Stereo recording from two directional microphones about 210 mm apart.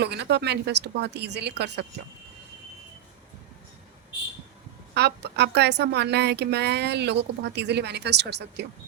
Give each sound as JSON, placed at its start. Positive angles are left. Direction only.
{"t": 0.0, "sound": "a woman's voice", "side_deg": -50}
{"t": 4.9, "sound": "a woman's voice", "side_deg": -55}